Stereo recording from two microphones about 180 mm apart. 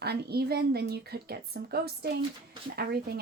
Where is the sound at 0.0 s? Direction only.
65° right (ahead or behind).